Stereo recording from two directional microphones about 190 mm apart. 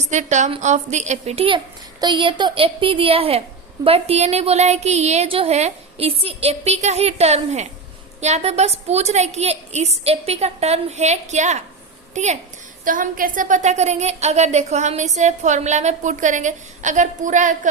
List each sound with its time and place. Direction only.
0.1 s a woman's voice: 40° right (ahead or behind)